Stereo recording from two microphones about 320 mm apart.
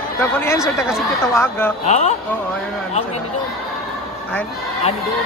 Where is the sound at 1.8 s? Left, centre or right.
Left.